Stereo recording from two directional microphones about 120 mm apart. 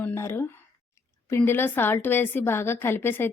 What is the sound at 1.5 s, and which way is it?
Speech, 20° left (ahead or behind).